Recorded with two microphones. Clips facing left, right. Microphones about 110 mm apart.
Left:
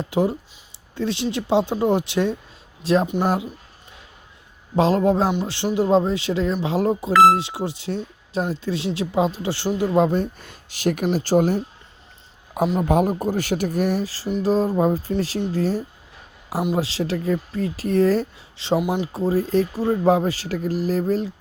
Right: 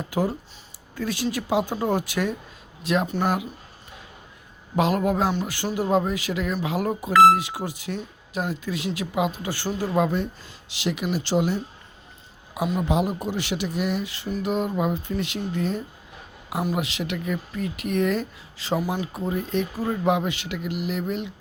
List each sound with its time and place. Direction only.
0.0 s speech: 25° left (ahead or behind)
3.1 s speech: 20° left (ahead or behind)
4.8 s speech: 30° left (ahead or behind)
10.4 s speech: 50° left (ahead or behind)
12.8 s speech: 45° left (ahead or behind)